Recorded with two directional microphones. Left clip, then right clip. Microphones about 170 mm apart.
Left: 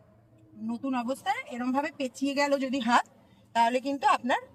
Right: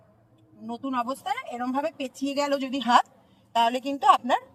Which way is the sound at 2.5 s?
15° left (ahead or behind).